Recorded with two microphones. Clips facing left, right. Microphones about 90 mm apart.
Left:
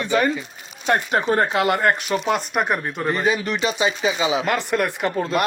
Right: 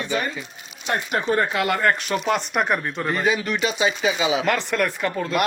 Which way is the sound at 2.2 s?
Centre (ahead or behind).